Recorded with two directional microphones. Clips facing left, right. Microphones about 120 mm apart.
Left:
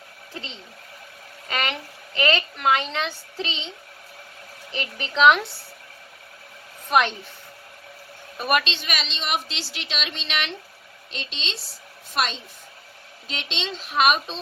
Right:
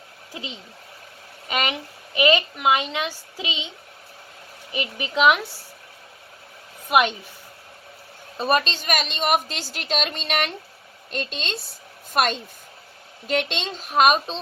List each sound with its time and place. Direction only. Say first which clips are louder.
0.3 s a woman's voice: right 2 dB; 15° right (ahead or behind)
4.7 s a woman's voice: right 3 dB; 10° right (ahead or behind)
8.4 s a woman's voice: right 2 dB; 30° right (ahead or behind)
8.6 s a woman's voice: right 5 dB; 40° right (ahead or behind)